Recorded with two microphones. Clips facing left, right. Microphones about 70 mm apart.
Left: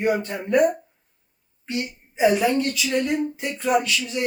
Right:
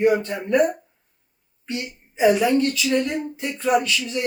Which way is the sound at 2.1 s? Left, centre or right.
Left.